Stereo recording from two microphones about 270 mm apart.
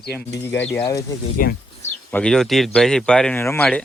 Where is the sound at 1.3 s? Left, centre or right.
Left.